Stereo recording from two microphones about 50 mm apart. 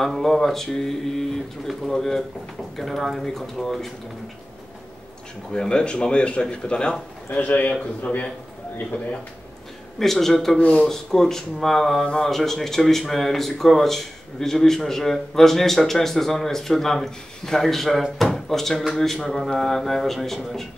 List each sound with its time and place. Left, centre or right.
0.0 s speech: centre
5.5 s speech: centre
7.2 s a man's voice: left
9.9 s speech: centre
10.6 s speech: left
10.9 s speech: centre